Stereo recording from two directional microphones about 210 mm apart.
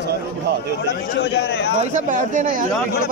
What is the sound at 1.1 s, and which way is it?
Speech, 55° left (ahead or behind).